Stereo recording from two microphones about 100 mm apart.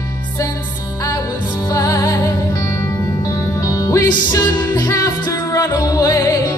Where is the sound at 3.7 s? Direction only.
35° left (ahead or behind).